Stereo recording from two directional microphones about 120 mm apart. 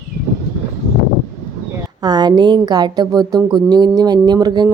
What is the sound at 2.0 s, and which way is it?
A woman's voice, 35° right (ahead or behind).